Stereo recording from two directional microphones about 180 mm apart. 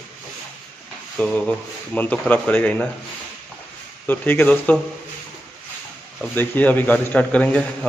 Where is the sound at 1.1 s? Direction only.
5° left (ahead or behind).